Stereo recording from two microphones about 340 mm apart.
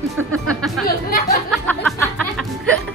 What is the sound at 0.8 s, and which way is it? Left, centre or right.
Speech, left.